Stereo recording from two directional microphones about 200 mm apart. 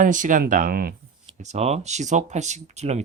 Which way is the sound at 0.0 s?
40° right (ahead or behind).